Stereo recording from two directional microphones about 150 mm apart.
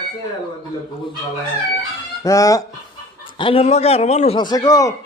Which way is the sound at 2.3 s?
20° left (ahead or behind).